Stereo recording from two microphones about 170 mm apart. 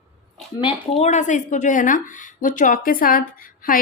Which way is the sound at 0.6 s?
35° left (ahead or behind).